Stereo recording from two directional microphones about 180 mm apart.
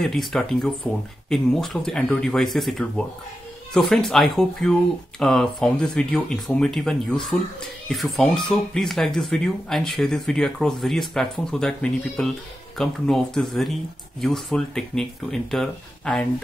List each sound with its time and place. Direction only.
0.0 s speech: centre (ahead or behind)